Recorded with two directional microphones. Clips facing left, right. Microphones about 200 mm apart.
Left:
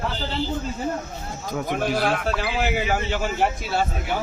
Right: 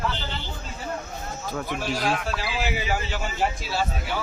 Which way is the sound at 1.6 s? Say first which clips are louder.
Left 4 dB; 55° left (ahead or behind).